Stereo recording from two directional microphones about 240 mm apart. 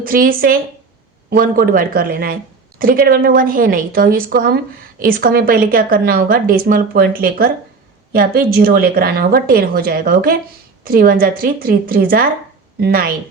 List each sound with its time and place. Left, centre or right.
0.0 s speech: right